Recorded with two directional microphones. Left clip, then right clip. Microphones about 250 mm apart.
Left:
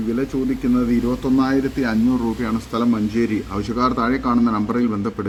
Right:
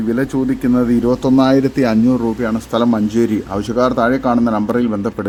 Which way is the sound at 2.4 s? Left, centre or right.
Centre.